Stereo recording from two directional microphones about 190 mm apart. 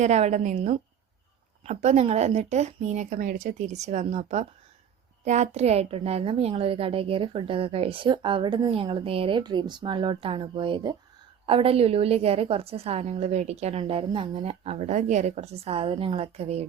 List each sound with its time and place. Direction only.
0.0 s a woman's voice: 35° right (ahead or behind)